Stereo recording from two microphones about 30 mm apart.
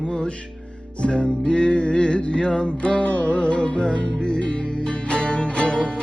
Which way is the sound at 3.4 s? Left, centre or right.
Left.